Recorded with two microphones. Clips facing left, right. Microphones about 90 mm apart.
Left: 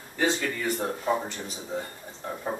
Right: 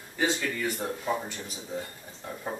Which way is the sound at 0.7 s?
30° left (ahead or behind).